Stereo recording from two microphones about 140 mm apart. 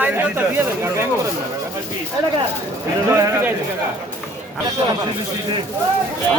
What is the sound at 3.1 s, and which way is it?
Speech, 20° right (ahead or behind).